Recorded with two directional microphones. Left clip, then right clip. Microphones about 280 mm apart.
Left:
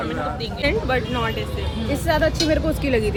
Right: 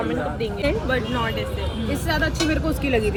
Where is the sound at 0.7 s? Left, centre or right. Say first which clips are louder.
Left 3 dB; centre.